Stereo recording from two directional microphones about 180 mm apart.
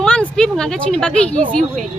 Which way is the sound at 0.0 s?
5° left (ahead or behind).